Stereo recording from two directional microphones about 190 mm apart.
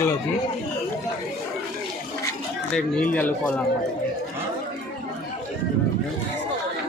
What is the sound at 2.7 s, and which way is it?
Speech, 5° left (ahead or behind).